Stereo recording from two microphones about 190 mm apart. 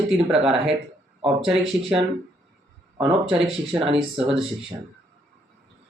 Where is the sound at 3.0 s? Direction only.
25° right (ahead or behind).